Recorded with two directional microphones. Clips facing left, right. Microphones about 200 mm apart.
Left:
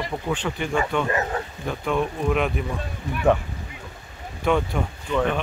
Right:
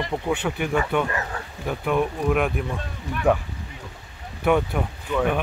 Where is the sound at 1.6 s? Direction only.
10° right (ahead or behind).